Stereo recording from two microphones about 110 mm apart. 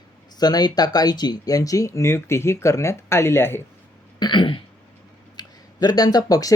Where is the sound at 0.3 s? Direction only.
40° left (ahead or behind); by 3.6 s 20° left (ahead or behind).